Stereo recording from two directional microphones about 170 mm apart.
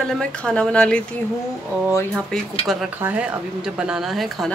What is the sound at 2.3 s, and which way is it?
Speech, 5° left (ahead or behind).